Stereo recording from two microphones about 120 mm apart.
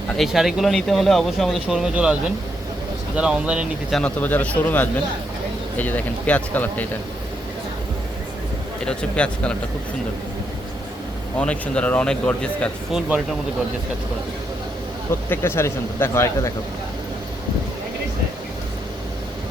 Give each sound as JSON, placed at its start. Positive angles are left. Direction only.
{"t": 0.2, "sound": "speech", "side_deg": 0}
{"t": 3.2, "sound": "speech", "side_deg": -10}
{"t": 4.0, "sound": "speech", "side_deg": 15}
{"t": 8.8, "sound": "speech", "side_deg": 10}
{"t": 11.3, "sound": "speech", "side_deg": 10}
{"t": 12.9, "sound": "speech", "side_deg": -5}
{"t": 15.3, "sound": "speech", "side_deg": 20}